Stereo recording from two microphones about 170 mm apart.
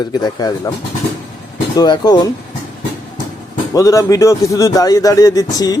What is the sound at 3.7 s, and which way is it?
A man's voice, 20° left (ahead or behind).